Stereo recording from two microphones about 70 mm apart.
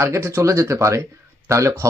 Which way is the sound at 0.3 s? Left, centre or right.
Right.